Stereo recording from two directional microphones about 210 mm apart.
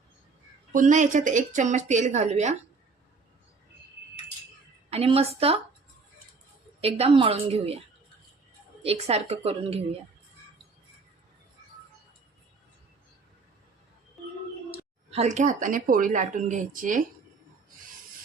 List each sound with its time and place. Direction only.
0.7 s a woman's voice: 35° right (ahead or behind)
4.9 s a woman's voice: 30° right (ahead or behind)
6.8 s a woman's voice: 25° right (ahead or behind)
8.8 s a woman's voice: 30° right (ahead or behind)
15.1 s a woman's voice: 30° right (ahead or behind)